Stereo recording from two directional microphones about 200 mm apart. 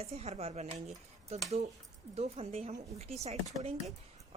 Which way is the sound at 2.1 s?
30° right (ahead or behind).